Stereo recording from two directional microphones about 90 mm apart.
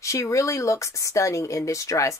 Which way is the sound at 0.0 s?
35° left (ahead or behind).